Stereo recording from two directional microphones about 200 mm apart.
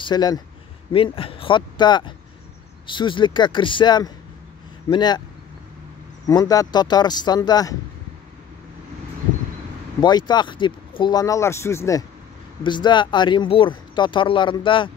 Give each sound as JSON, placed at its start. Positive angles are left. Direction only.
{"t": 0.0, "sound": "speech", "side_deg": 20}
{"t": 6.2, "sound": "speech", "side_deg": 20}
{"t": 9.9, "sound": "speech", "side_deg": 20}